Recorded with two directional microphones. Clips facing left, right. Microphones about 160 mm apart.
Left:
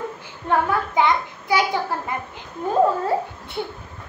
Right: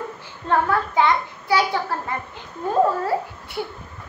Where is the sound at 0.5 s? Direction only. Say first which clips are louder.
Even; 15° left (ahead or behind).